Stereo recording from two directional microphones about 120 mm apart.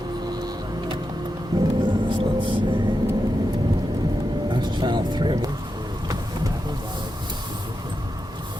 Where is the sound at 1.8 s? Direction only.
40° right (ahead or behind).